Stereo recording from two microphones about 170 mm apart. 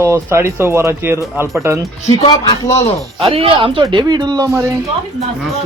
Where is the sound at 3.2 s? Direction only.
35° right (ahead or behind).